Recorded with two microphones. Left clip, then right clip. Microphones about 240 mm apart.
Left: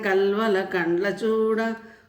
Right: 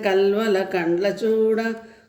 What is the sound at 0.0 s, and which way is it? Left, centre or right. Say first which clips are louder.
Music: right 3 dB; centre.